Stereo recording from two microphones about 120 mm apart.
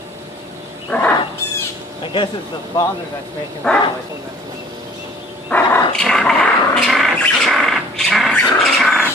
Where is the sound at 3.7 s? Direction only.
15° left (ahead or behind).